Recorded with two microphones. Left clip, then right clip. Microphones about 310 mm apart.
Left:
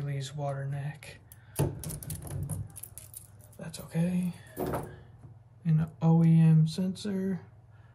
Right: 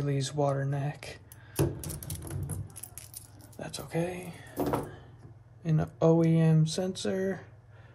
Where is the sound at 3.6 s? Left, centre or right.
Right.